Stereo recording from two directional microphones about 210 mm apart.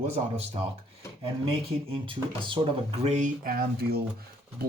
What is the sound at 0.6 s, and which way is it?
Speech, 30° right (ahead or behind).